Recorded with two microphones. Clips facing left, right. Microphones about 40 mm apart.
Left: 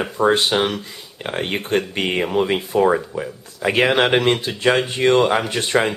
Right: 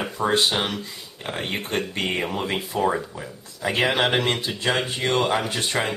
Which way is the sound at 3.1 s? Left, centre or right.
Left.